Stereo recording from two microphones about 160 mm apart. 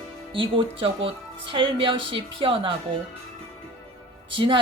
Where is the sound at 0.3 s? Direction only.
35° right (ahead or behind).